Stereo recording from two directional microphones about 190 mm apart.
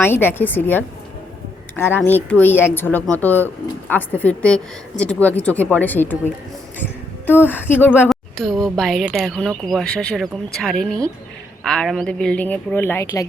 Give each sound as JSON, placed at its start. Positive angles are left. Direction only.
{"t": 0.0, "sound": "a woman's voice", "side_deg": 10}